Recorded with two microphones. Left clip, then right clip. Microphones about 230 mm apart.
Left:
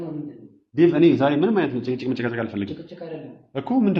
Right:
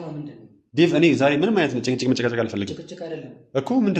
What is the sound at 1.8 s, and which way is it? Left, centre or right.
Speech, right.